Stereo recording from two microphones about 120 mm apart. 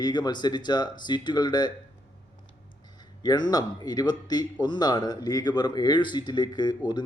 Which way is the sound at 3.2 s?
35° left (ahead or behind).